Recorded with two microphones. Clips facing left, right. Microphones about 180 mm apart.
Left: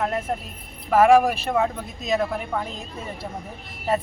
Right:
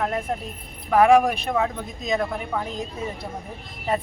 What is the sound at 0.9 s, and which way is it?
Speech, centre (ahead or behind).